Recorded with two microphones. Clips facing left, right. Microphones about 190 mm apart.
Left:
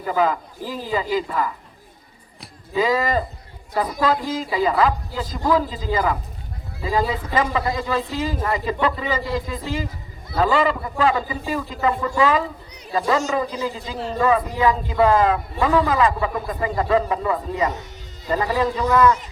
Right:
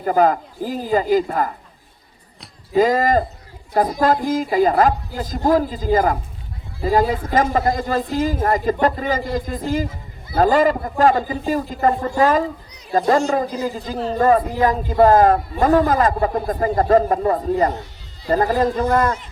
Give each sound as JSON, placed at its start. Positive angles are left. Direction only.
{"t": 0.0, "sound": "speech", "side_deg": -45}
{"t": 2.7, "sound": "speech", "side_deg": -45}